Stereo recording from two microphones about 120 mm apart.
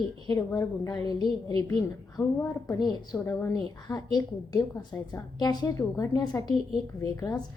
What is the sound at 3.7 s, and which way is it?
A woman's voice, 35° left (ahead or behind).